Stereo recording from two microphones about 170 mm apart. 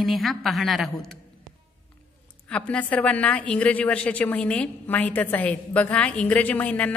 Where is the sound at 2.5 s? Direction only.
5° left (ahead or behind).